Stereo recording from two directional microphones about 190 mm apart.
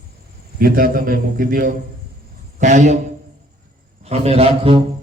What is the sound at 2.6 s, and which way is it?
Speech, 40° right (ahead or behind).